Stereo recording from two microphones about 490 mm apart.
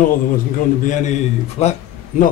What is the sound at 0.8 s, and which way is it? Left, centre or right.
Speech, centre.